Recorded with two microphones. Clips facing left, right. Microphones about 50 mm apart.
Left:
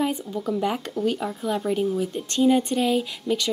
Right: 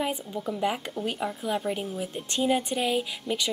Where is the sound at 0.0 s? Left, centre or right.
Centre.